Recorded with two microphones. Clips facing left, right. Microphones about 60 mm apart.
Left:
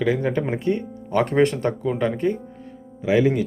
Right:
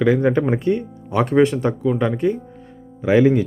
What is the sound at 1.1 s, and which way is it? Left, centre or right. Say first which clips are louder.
Speech: right 3 dB; centre.